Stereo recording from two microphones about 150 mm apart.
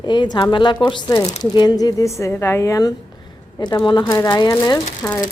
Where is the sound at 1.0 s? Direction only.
20° left (ahead or behind).